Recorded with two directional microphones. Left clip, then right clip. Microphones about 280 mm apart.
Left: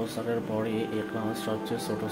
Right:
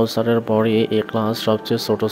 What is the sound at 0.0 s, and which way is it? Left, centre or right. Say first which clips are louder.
Speech: right 13 dB; right.